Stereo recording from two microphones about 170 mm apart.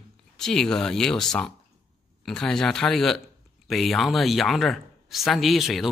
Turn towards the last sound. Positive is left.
turn(degrees=0)  # may be behind; listen again after turning